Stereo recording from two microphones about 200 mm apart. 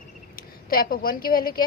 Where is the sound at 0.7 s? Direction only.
45° left (ahead or behind).